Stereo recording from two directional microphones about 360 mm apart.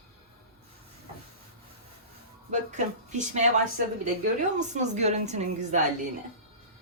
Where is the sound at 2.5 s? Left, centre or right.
Centre.